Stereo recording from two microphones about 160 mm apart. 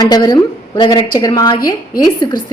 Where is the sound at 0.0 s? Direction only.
25° left (ahead or behind).